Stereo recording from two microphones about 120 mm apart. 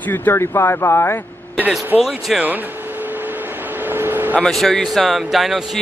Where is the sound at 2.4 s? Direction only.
15° right (ahead or behind).